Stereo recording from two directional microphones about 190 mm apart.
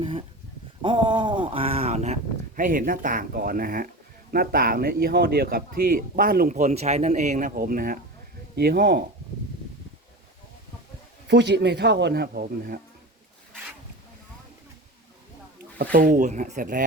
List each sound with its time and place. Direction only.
0.0 s speech: 30° right (ahead or behind); by 9.0 s 55° right (ahead or behind)
11.3 s speech: 65° right (ahead or behind)
15.8 s speech: 45° right (ahead or behind)